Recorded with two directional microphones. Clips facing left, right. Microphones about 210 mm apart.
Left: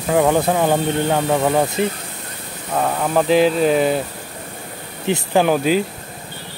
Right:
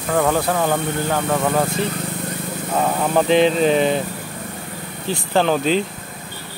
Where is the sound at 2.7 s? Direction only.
Centre (ahead or behind).